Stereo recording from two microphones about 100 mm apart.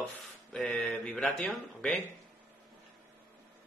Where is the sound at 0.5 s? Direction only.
5° left (ahead or behind).